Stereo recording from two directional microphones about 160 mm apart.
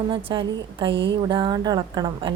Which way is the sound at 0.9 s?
90° right.